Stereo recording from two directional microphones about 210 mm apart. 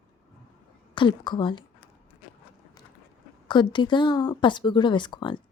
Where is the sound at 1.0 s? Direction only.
20° left (ahead or behind).